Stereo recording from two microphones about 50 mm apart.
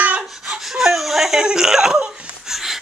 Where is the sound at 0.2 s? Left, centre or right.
Centre.